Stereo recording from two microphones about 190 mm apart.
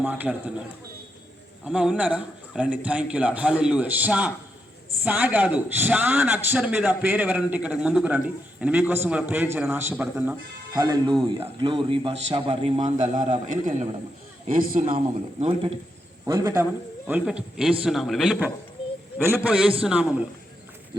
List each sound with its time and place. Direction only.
0.0 s a man's voice: 10° right (ahead or behind)
1.6 s a man's voice: 5° right (ahead or behind)
10.8 s a man's voice: 20° right (ahead or behind); by 14.9 s 45° right (ahead or behind)
14.9 s a man's voice: 30° right (ahead or behind)
16.2 s a man's voice: 20° right (ahead or behind)
17.1 s a man's voice: 5° right (ahead or behind)